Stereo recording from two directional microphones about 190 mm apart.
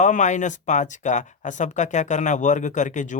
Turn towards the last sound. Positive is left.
turn(degrees=40)  # may be behind; listen again after turning